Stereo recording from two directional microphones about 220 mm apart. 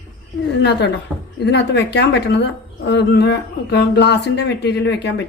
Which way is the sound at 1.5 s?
50° left (ahead or behind).